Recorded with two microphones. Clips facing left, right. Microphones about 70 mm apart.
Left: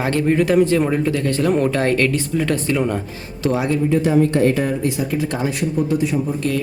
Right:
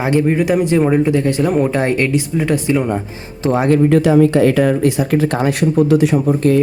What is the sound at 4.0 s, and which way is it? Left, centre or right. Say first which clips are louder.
Speech: right 4 dB; right.